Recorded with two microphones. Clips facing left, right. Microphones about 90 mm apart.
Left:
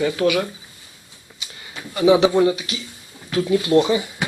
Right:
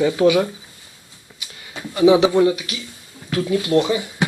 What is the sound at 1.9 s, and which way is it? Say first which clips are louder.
Speech: right 1 dB; 5° right (ahead or behind).